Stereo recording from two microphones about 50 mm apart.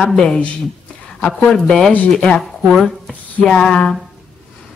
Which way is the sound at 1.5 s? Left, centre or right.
Centre.